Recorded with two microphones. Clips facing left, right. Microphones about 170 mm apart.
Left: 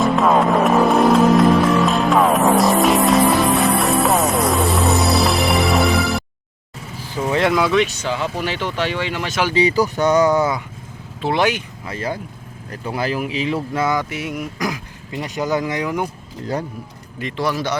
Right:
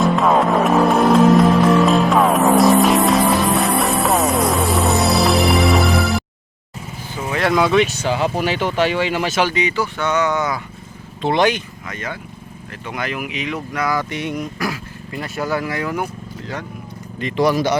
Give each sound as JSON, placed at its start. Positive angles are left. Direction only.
{"t": 0.0, "sound": "music", "side_deg": 0}
{"t": 7.3, "sound": "vehicle", "side_deg": 25}
{"t": 7.5, "sound": "speech", "side_deg": 0}
{"t": 8.0, "sound": "speech", "side_deg": -40}
{"t": 8.4, "sound": "speech", "side_deg": -10}
{"t": 9.6, "sound": "speech", "side_deg": 35}
{"t": 11.2, "sound": "speech", "side_deg": 5}
{"t": 11.9, "sound": "speech", "side_deg": 35}
{"t": 14.0, "sound": "speech", "side_deg": 5}
{"t": 14.6, "sound": "speech", "side_deg": 15}
{"t": 17.3, "sound": "speech", "side_deg": -15}